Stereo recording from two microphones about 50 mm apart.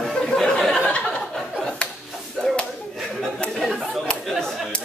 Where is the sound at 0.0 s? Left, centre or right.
Centre.